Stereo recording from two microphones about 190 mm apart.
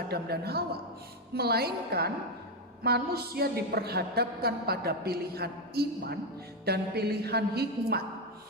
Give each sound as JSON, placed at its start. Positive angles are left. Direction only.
{"t": 0.1, "sound": "a woman's voice", "side_deg": -55}